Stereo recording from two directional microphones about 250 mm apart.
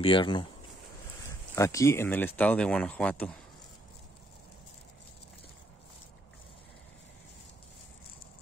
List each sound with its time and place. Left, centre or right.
0.0 s speech: centre
1.5 s speech: centre